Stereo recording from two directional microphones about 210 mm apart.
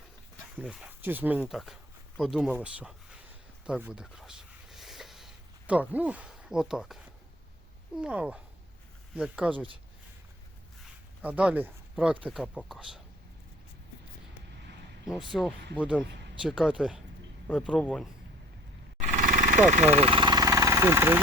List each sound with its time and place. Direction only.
0.6 s speech: 5° right (ahead or behind)
3.7 s a sound: 5° right (ahead or behind)
7.9 s speech: 5° right (ahead or behind)
11.2 s speech: 5° right (ahead or behind)
15.0 s speech: 5° right (ahead or behind)
19.1 s vehicle: 40° right (ahead or behind)
19.7 s speech: 30° right (ahead or behind); by 21.2 s 10° right (ahead or behind)